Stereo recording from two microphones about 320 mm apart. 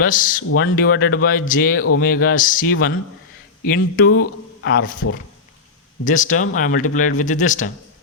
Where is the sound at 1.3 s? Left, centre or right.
Left.